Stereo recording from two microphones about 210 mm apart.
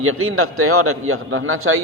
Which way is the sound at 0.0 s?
90° right.